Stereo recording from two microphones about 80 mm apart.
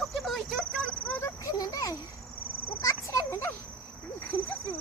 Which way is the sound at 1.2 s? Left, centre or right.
Left.